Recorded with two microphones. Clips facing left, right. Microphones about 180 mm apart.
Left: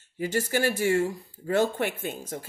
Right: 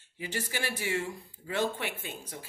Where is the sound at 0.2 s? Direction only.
45° left (ahead or behind).